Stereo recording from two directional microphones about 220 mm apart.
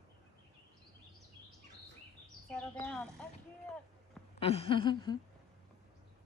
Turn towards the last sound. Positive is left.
turn(degrees=20)  # may be behind; listen again after turning